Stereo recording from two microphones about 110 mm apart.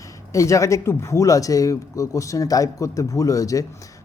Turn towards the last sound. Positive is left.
turn(degrees=30)  # may be behind; listen again after turning